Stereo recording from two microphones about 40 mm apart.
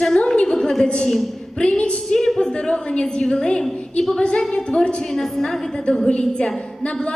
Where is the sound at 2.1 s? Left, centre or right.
Centre.